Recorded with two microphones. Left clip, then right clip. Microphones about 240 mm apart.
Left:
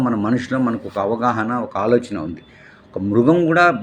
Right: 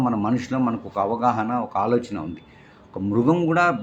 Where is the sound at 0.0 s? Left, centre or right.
Centre.